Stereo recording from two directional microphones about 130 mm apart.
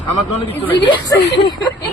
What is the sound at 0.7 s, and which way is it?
Speech, 40° left (ahead or behind).